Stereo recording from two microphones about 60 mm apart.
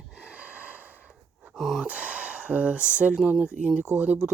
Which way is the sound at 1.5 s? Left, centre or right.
Centre.